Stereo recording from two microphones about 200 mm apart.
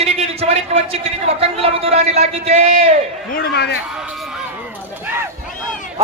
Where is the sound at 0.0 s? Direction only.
30° right (ahead or behind).